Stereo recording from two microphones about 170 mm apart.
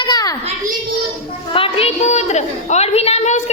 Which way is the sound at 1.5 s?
35° left (ahead or behind).